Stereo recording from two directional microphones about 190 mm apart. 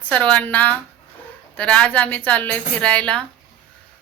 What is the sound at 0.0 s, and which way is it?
A woman's voice, 5° left (ahead or behind).